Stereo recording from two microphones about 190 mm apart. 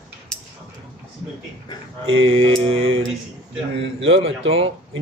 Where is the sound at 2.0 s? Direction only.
90° right.